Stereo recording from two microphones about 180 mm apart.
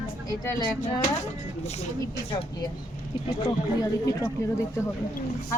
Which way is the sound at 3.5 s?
20° left (ahead or behind).